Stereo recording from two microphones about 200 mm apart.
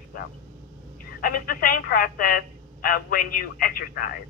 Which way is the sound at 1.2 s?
45° left (ahead or behind).